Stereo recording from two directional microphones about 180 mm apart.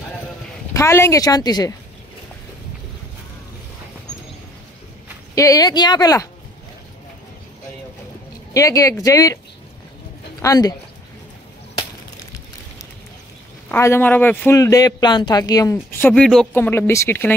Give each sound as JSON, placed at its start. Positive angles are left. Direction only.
{"t": 0.7, "sound": "speech", "side_deg": 15}
{"t": 5.3, "sound": "speech", "side_deg": 20}
{"t": 8.5, "sound": "speech", "side_deg": 20}
{"t": 10.4, "sound": "speech", "side_deg": 20}
{"t": 13.7, "sound": "a man's voice", "side_deg": 15}